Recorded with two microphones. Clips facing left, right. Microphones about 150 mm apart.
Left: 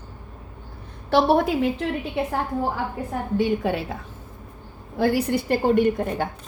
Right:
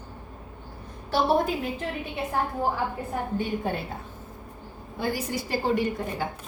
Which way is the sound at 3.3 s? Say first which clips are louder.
Left 8 dB; 90° left.